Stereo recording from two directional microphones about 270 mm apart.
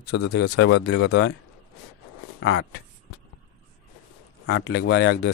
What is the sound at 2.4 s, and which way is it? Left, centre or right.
Speech, left.